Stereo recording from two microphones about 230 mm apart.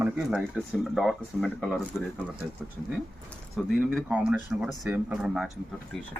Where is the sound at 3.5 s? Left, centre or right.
Centre.